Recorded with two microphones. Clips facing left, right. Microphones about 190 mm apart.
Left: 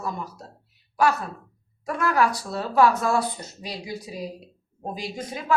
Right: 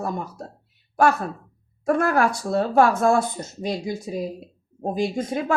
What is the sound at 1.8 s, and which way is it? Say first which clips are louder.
Speech: right 3 dB; 50° right (ahead or behind).